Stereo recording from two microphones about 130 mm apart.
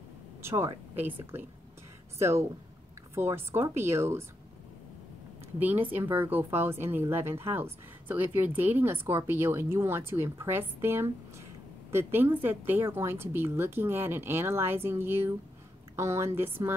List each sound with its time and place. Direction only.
0.4 s a woman's voice: 20° right (ahead or behind)
5.6 s a woman's voice: 15° right (ahead or behind)